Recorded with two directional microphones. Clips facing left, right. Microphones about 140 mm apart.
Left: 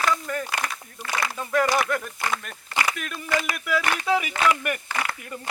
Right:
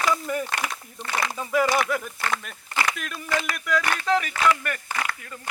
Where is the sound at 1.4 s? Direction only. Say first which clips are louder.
Even; 5° right (ahead or behind); by 5.4 s 20° left (ahead or behind).